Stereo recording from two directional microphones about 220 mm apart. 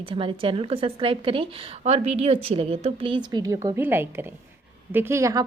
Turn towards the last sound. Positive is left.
turn(degrees=-15)  # may be behind; listen again after turning